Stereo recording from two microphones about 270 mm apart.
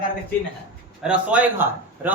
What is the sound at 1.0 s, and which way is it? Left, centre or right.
Speech, centre.